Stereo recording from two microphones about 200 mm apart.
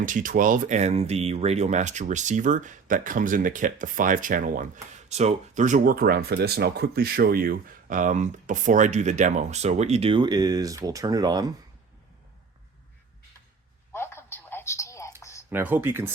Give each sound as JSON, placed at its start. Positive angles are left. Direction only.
{"t": 0.0, "sound": "speech", "side_deg": -40}
{"t": 13.9, "sound": "telephone", "side_deg": 10}
{"t": 15.2, "sound": "a sound", "side_deg": 15}
{"t": 15.4, "sound": "speech", "side_deg": -10}